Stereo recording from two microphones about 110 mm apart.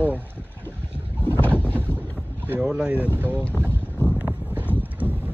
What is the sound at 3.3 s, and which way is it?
Speech, 10° left (ahead or behind).